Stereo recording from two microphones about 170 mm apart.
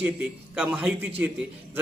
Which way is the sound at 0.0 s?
10° right (ahead or behind).